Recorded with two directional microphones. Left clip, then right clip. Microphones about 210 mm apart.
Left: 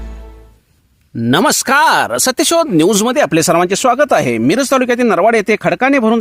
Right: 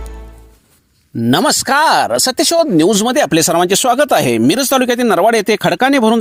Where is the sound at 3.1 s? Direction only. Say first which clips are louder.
Left 1 dB; 15° right (ahead or behind).